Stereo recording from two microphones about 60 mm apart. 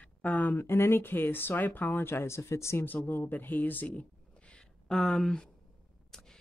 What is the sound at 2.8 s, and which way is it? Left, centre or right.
Speech, left.